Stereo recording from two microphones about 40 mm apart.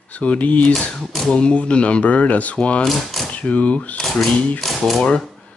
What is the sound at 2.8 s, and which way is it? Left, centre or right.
Speech, centre.